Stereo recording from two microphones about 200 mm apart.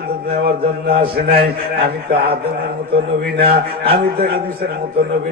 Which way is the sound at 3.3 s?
50° right (ahead or behind).